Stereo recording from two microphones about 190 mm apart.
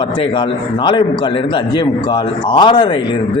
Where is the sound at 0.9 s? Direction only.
25° left (ahead or behind).